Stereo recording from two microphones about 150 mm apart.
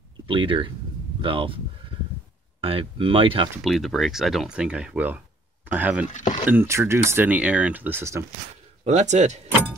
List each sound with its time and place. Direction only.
0.3 s speech: 35° right (ahead or behind)
3.6 s speech: centre (ahead or behind)
6.0 s speech: 55° left (ahead or behind)
6.4 s speech: 15° right (ahead or behind)
8.8 s speech: 50° right (ahead or behind)